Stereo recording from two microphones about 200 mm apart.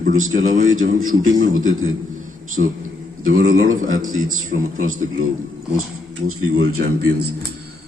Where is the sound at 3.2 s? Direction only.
90° right.